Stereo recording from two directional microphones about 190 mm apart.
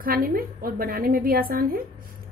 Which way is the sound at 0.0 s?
50° right (ahead or behind).